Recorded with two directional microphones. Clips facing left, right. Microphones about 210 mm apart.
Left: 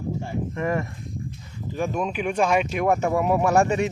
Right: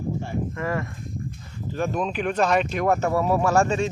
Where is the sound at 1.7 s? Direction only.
10° left (ahead or behind).